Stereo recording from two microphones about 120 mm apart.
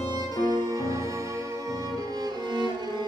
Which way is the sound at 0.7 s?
30° right (ahead or behind).